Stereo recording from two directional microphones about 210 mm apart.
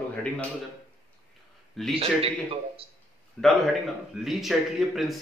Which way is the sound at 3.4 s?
Centre (ahead or behind).